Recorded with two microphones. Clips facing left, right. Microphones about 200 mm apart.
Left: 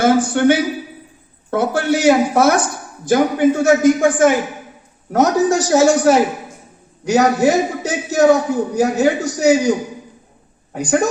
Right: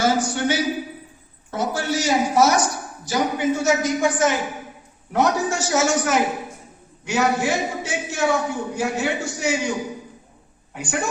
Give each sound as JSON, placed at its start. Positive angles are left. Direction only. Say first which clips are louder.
{"t": 0.0, "sound": "a woman's voice", "louder": "left 7 dB", "side_deg": 55}
{"t": 5.1, "sound": "a man's voice", "louder": "left 7 dB", "side_deg": 40}